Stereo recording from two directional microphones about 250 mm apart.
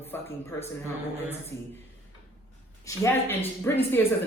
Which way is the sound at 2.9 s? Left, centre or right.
Centre.